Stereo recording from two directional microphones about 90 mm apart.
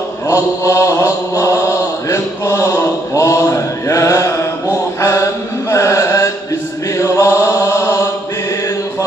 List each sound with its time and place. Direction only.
0.3 s mantra: 35° left (ahead or behind)